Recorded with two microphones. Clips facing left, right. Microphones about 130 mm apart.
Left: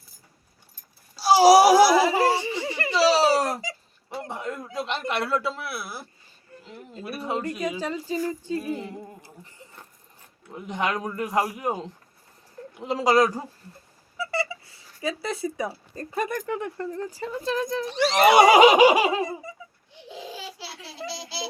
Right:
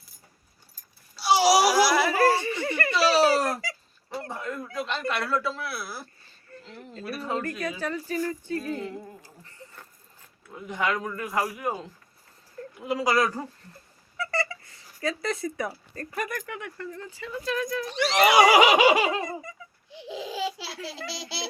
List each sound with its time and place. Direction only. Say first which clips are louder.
1.1 s a sound: left 6 dB; 40° left (ahead or behind)
2.0 s a sound: even; 15° left (ahead or behind)
2.9 s babbling: left 2 dB; 30° left (ahead or behind)
4.2 s a man's voice: left 2 dB; 20° left (ahead or behind)
6.6 s speech: left 1 dB; 10° left (ahead or behind)
7.2 s a man's voice: left 2 dB; 20° left (ahead or behind)
14.2 s a sound: left 1 dB; 10° left (ahead or behind)
16.1 s speech: left 6 dB; 30° left (ahead or behind); by 19.5 s 10° left (ahead or behind)
19.9 s laughter: right 4 dB; 90° right
21.1 s a child's voice: left 1 dB; 80° right